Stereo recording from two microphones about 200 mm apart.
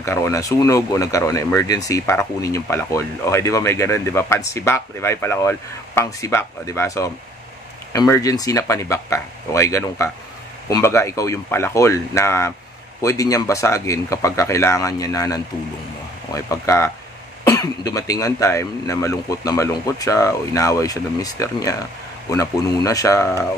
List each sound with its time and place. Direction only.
0.0 s speech: 15° left (ahead or behind)